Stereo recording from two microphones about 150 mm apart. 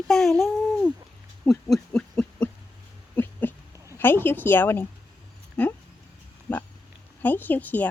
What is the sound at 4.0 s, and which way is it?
Speech, 15° left (ahead or behind).